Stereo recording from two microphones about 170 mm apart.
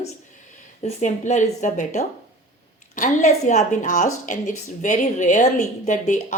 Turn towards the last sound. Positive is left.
turn(degrees=50)  # may be behind; listen again after turning